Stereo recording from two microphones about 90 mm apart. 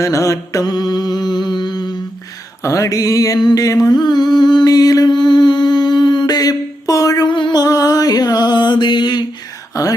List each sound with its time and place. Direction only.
0.0 s mantra: 35° left (ahead or behind); by 2.0 s 55° left (ahead or behind)
2.6 s a sound: 35° left (ahead or behind)
7.3 s music: 60° left (ahead or behind)
7.6 s mantra: 45° left (ahead or behind)
9.7 s speech: 40° left (ahead or behind)